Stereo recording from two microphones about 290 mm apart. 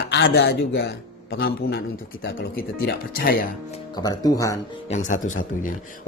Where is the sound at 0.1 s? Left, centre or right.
Left.